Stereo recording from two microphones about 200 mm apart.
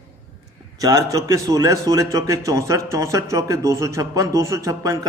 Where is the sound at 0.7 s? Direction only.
15° right (ahead or behind).